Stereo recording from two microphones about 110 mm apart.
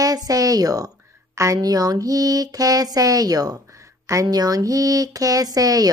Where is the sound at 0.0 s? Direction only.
35° right (ahead or behind).